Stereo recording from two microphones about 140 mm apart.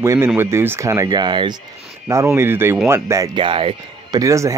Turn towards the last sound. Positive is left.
turn(degrees=-20)  # may be behind; listen again after turning